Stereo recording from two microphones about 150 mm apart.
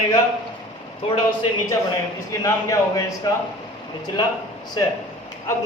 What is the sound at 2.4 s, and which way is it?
Speech, 20° left (ahead or behind).